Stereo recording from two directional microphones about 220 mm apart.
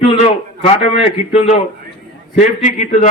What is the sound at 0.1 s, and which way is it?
A man's voice, 25° left (ahead or behind).